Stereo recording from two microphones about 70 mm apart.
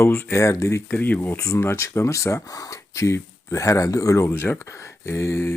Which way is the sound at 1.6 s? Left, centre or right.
Left.